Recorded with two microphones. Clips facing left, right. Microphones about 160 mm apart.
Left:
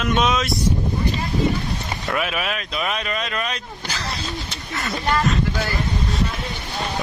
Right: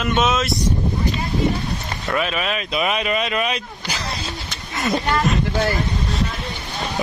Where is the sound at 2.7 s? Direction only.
10° right (ahead or behind).